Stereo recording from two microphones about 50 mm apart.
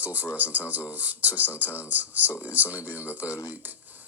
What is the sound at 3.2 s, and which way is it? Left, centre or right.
Speech, left.